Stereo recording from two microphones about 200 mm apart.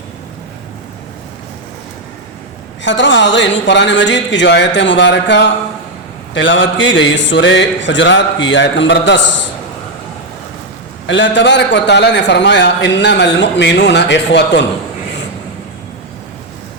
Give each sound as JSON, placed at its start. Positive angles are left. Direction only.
{"t": 2.8, "sound": "a man's voice", "side_deg": 65}
{"t": 11.0, "sound": "a man's voice", "side_deg": 65}